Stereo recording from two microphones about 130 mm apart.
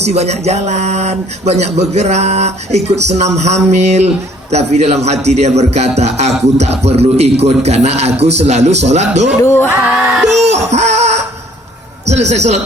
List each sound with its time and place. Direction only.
0.0 s speech: 55° right (ahead or behind)
9.4 s a sound: 20° left (ahead or behind)
10.3 s speech: 60° right (ahead or behind)